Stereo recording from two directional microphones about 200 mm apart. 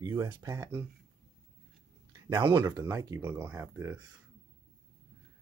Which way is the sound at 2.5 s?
15° right (ahead or behind).